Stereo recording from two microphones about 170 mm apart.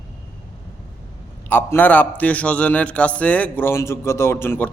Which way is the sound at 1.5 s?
10° left (ahead or behind).